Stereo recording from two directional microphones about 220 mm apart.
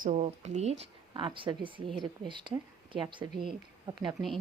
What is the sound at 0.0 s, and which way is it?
A woman's voice, 30° right (ahead or behind).